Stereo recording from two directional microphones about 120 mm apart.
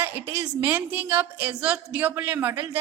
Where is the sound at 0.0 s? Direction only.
20° right (ahead or behind).